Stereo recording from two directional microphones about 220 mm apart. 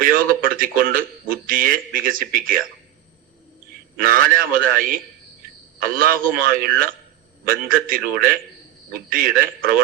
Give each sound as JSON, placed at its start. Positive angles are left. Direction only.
{"t": 0.0, "sound": "speech", "side_deg": -40}
{"t": 3.9, "sound": "a man's voice", "side_deg": -40}